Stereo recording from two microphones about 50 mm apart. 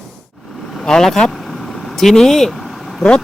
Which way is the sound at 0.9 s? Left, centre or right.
Centre.